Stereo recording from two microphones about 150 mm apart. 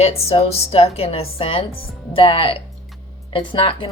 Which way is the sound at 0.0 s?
40° left (ahead or behind).